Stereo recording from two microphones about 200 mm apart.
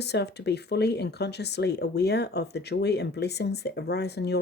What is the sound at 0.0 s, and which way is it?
Speech, 55° left (ahead or behind).